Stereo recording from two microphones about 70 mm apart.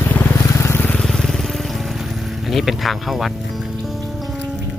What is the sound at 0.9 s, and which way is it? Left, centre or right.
Vehicle, centre.